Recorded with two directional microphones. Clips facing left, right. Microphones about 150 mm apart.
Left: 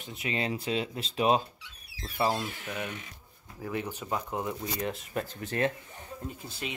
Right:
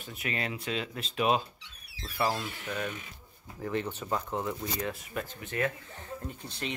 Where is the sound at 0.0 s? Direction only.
25° left (ahead or behind).